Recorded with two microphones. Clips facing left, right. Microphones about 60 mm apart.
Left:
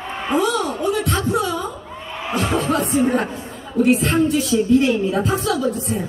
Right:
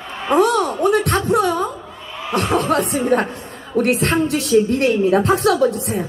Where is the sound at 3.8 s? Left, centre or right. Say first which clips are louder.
Left 1 dB; right.